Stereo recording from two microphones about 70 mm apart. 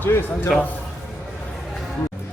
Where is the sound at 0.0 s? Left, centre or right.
Left.